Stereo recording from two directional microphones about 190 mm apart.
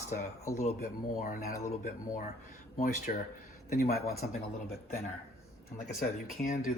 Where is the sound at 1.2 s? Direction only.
45° left (ahead or behind).